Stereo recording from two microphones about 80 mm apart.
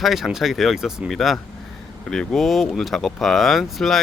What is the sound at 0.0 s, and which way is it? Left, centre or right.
Speech, centre.